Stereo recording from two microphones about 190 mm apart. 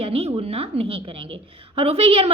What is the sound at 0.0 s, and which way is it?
A woman's voice, 30° right (ahead or behind).